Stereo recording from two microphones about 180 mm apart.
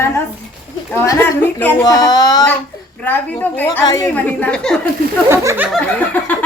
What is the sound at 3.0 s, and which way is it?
A woman's voice, 10° left (ahead or behind).